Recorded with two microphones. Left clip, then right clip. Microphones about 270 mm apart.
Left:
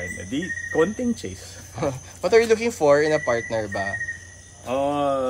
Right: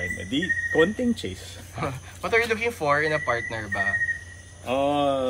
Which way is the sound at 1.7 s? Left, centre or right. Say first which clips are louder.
Left 5 dB; centre.